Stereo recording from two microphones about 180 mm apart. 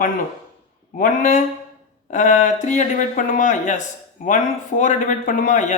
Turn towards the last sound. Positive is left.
turn(degrees=45)  # may be behind; listen again after turning